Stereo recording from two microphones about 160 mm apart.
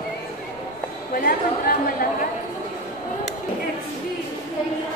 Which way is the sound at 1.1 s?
65° left (ahead or behind).